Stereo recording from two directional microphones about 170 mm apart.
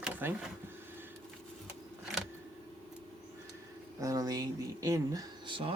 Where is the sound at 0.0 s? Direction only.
10° right (ahead or behind).